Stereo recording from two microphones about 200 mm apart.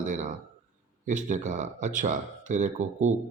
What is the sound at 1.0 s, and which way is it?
Speech, 40° right (ahead or behind).